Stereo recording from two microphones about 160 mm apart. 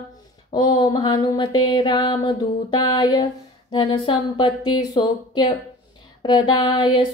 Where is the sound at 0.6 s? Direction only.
25° left (ahead or behind).